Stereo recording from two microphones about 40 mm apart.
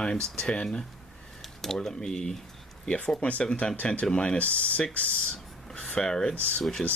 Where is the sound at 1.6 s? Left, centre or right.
Centre.